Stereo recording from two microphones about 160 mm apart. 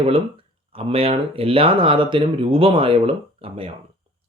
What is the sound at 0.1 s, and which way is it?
Speech, 35° right (ahead or behind).